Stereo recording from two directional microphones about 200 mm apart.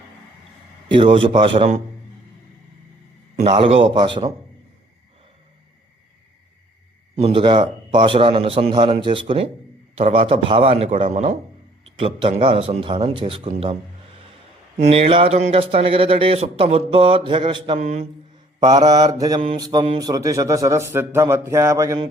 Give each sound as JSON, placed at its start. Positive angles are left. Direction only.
{"t": 0.9, "sound": "a man's voice", "side_deg": -25}
{"t": 3.4, "sound": "speech", "side_deg": -25}
{"t": 7.2, "sound": "a man's voice", "side_deg": -30}
{"t": 14.8, "sound": "speech", "side_deg": -30}